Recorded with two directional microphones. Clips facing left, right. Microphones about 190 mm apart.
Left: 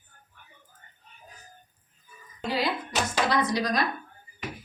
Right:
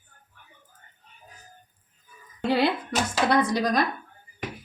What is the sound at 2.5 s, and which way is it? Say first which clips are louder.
A woman's voice: right 5 dB; 60° right (ahead or behind).